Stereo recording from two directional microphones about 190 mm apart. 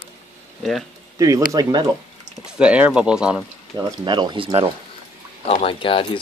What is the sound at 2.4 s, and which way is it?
Speech, 5° right (ahead or behind).